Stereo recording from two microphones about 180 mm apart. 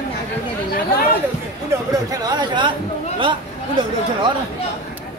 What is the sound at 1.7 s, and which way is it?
Speech, 20° right (ahead or behind).